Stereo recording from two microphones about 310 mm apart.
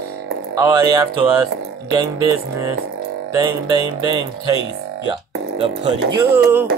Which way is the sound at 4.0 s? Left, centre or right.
Left.